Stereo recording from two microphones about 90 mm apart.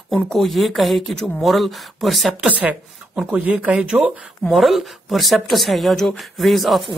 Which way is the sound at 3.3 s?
15° right (ahead or behind).